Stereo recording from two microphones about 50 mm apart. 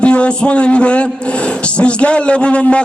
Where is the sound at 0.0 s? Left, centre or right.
Left.